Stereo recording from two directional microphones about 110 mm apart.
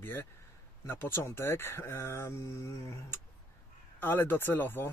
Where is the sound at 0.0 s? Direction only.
20° left (ahead or behind).